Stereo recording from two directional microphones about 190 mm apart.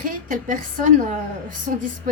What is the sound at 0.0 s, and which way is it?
A woman's voice, 45° right (ahead or behind).